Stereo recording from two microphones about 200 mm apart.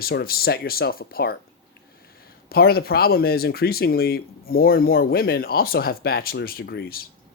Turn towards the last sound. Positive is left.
turn(degrees=50)  # may be behind; listen again after turning